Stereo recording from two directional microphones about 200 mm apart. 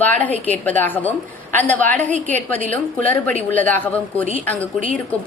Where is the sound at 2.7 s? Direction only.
10° left (ahead or behind).